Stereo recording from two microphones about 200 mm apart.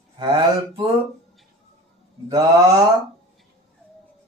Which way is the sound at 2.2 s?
20° right (ahead or behind).